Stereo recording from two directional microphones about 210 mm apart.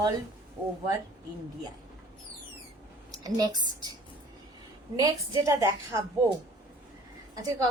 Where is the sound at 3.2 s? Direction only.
20° right (ahead or behind).